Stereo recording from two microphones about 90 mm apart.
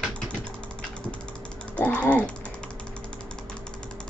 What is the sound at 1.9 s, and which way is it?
Typing, 15° left (ahead or behind).